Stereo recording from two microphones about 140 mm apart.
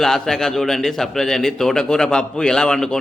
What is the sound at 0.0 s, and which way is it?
A man's voice, 5° left (ahead or behind).